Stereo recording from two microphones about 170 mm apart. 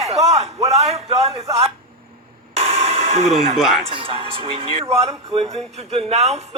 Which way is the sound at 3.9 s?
30° right (ahead or behind).